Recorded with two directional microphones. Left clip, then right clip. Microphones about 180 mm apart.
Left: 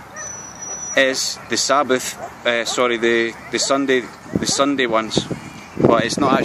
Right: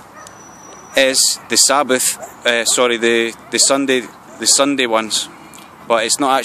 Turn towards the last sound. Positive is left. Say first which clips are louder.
# right 2 dB
turn(degrees=-55)  # may be behind; listen again after turning